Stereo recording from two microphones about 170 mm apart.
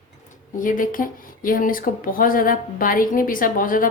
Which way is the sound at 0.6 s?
50° left (ahead or behind).